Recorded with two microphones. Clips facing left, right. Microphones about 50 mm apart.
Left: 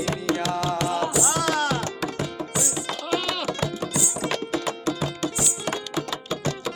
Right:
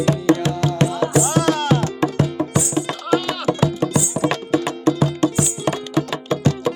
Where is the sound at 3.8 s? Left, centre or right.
Right.